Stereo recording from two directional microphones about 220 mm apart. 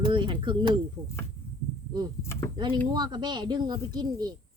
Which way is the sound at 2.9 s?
20° right (ahead or behind).